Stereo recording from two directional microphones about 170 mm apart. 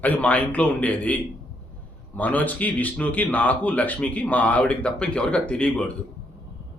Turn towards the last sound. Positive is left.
turn(degrees=5)  # may be behind; listen again after turning